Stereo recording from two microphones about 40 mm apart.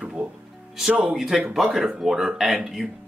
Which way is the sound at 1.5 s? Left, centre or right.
Centre.